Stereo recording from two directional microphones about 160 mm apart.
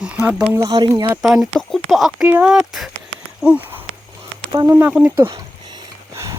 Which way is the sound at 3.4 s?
10° right (ahead or behind).